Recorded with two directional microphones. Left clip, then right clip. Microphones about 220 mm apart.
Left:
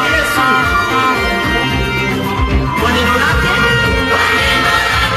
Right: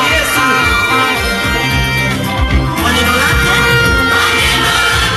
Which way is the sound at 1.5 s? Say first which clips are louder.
Right 1 dB; 50° right (ahead or behind).